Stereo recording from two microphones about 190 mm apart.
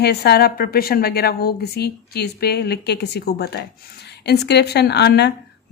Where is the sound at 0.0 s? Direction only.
60° left (ahead or behind).